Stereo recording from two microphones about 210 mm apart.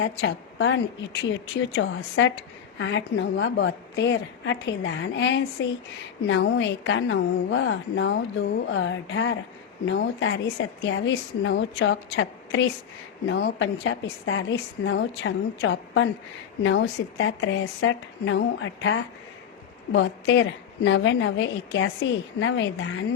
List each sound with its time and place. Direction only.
0.0 s a woman's voice: 60° left (ahead or behind)